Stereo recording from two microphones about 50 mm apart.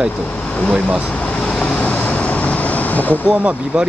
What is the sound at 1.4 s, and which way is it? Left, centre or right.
Vehicle, centre.